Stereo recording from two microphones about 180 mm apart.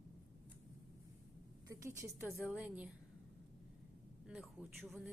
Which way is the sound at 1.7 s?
15° right (ahead or behind).